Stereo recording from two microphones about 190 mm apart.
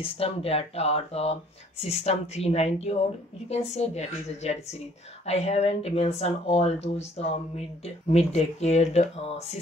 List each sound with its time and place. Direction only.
0.0 s speech: 30° left (ahead or behind)